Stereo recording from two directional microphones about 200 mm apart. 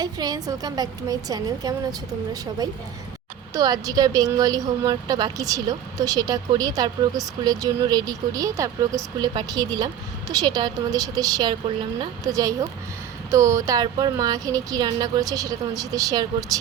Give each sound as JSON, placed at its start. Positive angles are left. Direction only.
{"t": 0.0, "sound": "speech", "side_deg": -20}